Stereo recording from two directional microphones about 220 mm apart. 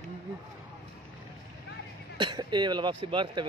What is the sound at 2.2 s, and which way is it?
Speech, 20° right (ahead or behind).